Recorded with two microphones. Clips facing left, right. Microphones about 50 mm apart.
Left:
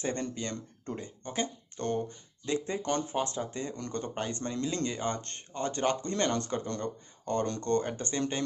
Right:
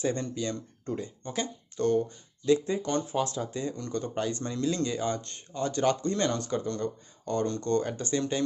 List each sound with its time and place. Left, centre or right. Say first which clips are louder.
0.0 s speech: right 4 dB; left
5.1 s speech: right 3 dB; left
5.6 s speech: right 3 dB; left
6.1 s speech: right 1 dB; left